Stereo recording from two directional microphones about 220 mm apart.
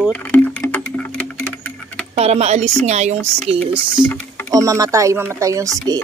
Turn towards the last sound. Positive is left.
turn(degrees=-15)  # may be behind; listen again after turning